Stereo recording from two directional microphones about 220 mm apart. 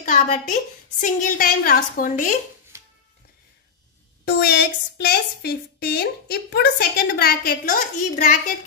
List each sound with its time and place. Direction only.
0.0 s a woman's voice: 35° left (ahead or behind)
2.7 s music: 15° right (ahead or behind)
4.2 s a woman's voice: 45° left (ahead or behind)